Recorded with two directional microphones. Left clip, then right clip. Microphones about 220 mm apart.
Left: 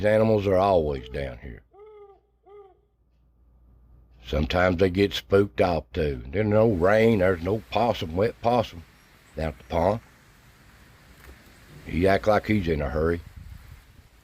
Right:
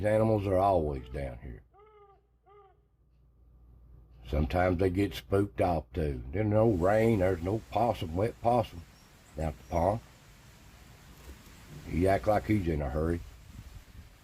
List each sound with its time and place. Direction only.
0.0 s speech: 35° left (ahead or behind)
4.2 s speech: 30° left (ahead or behind)
11.9 s speech: 35° left (ahead or behind)